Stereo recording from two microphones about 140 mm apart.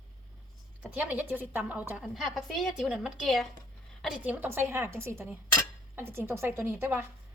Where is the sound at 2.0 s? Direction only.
Centre (ahead or behind).